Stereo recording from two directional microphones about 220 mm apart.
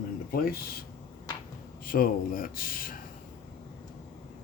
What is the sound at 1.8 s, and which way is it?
Speech, 40° left (ahead or behind).